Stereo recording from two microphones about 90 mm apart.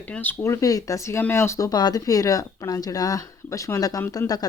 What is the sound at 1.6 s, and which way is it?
Speech, 45° left (ahead or behind).